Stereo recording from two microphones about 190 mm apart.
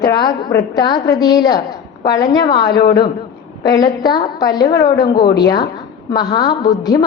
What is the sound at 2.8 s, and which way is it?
Speech, 55° left (ahead or behind).